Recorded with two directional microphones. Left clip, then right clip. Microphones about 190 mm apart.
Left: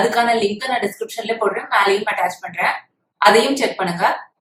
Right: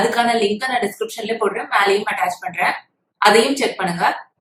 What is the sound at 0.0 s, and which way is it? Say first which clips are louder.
A woman's voice: left 1 dB; centre (ahead or behind).